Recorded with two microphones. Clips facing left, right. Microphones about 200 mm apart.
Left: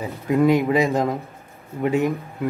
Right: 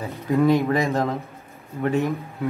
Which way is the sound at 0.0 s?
15° left (ahead or behind).